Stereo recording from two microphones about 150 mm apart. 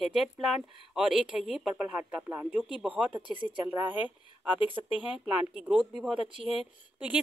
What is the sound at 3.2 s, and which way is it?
Speech, 35° right (ahead or behind).